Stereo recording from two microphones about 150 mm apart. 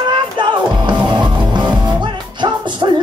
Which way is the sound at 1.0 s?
30° right (ahead or behind).